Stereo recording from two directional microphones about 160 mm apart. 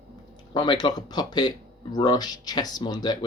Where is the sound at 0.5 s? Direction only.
30° left (ahead or behind).